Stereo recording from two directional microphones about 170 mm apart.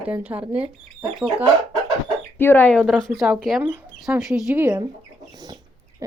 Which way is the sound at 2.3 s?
10° left (ahead or behind).